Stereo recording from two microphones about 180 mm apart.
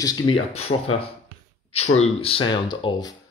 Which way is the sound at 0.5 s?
35° left (ahead or behind).